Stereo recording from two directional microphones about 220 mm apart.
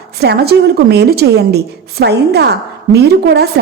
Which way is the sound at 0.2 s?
45° right (ahead or behind).